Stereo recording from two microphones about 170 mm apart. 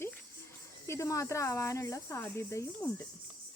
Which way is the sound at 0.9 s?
15° left (ahead or behind).